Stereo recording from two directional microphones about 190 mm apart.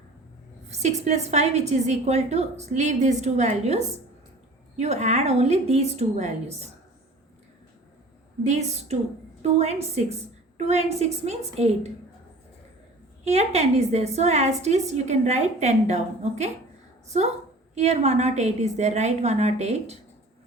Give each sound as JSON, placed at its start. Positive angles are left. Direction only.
{"t": 0.7, "sound": "a woman's voice", "side_deg": -35}
{"t": 8.4, "sound": "a woman's voice", "side_deg": -35}
{"t": 13.2, "sound": "a woman's voice", "side_deg": -35}
{"t": 17.7, "sound": "a woman's voice", "side_deg": -35}